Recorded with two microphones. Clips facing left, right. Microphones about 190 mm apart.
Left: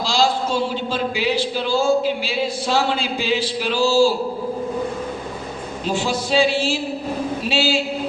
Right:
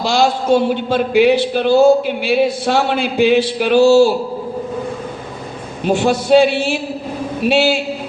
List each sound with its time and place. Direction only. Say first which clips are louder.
0.0 s a man's voice: right 4 dB; 60° right (ahead or behind)
5.8 s a man's voice: right 8 dB; 60° right (ahead or behind)